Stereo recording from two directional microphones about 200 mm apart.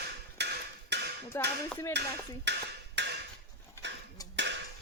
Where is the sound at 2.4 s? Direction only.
60° right (ahead or behind).